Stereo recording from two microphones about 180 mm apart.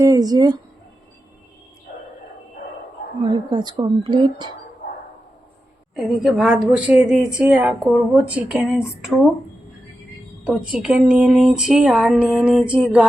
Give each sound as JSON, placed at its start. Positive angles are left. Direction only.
{"t": 0.0, "sound": "speech", "side_deg": -20}
{"t": 3.3, "sound": "speech", "side_deg": -25}
{"t": 4.8, "sound": "bow-wow", "side_deg": 60}
{"t": 5.9, "sound": "a woman's voice", "side_deg": 0}
{"t": 10.6, "sound": "a woman's voice", "side_deg": -5}
{"t": 12.5, "sound": "a sound", "side_deg": -5}